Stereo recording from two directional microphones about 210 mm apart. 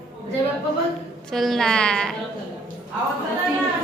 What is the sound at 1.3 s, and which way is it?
Speech, centre (ahead or behind).